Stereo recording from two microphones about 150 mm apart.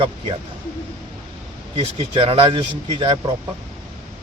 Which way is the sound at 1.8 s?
35° right (ahead or behind).